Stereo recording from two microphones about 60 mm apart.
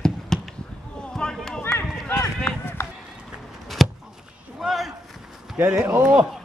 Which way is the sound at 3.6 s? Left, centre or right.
Centre.